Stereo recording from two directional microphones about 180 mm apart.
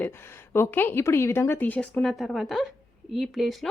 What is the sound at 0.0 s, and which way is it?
Speech, 15° left (ahead or behind).